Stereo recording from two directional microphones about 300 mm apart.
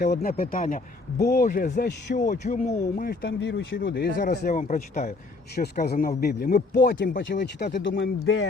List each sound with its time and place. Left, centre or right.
0.0 s speech: left